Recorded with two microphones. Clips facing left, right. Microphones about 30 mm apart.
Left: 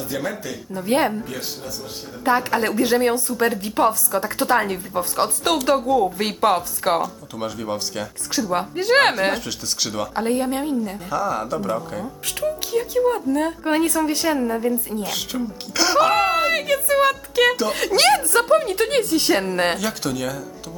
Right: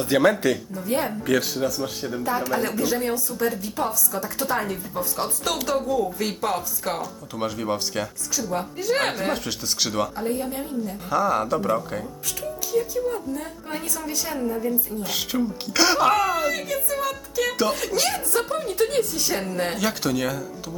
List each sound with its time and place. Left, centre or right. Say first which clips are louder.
0.0 s speech: right 8 dB; right
0.9 s a woman's voice: left 6 dB; left
2.2 s a woman's voice: left 6 dB; left
7.0 s speech: left 2 dB; centre
8.3 s a woman's voice: left 5 dB; left
9.3 s speech: left 1 dB; centre
10.2 s a woman's voice: left 5 dB; left
11.1 s speech: right 2 dB; centre
12.4 s a woman's voice: left 3 dB; left
14.3 s speech: left 4 dB; left
15.0 s speech: right 1 dB; centre
16.1 s a woman's voice: left 4 dB; left
19.8 s speech: right 1 dB; centre